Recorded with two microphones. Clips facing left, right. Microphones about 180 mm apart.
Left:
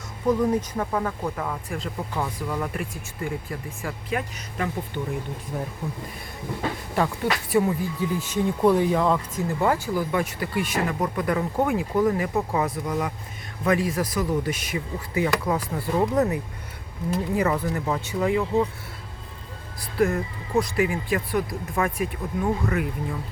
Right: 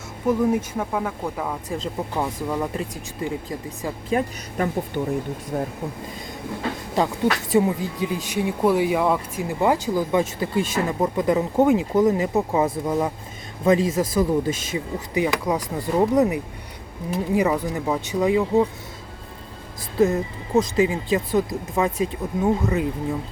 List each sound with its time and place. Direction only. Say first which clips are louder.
0.3 s speech: right 1 dB; 10° right (ahead or behind)
1.7 s speech: right 3 dB; 20° right (ahead or behind)
4.1 s speech: right 7 dB; 35° right (ahead or behind)
7.5 s speech: even; 20° right (ahead or behind)
20.0 s speech: right 3 dB; 20° right (ahead or behind)